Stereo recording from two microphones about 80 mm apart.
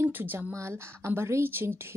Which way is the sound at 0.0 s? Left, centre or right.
Right.